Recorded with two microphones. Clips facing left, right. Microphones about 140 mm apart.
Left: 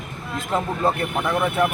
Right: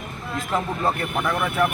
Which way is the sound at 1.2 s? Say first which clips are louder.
Left 2 dB; 20° left (ahead or behind).